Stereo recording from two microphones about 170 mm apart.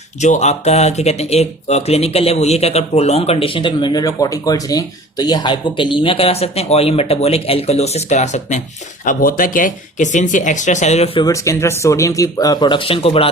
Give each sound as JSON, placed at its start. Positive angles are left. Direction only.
{"t": 0.2, "sound": "speech", "side_deg": 45}
{"t": 9.0, "sound": "speech", "side_deg": 55}
{"t": 11.3, "sound": "speech", "side_deg": 15}